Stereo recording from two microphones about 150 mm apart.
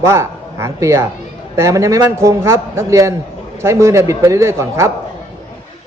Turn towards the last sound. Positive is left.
turn(degrees=-20)  # may be behind; listen again after turning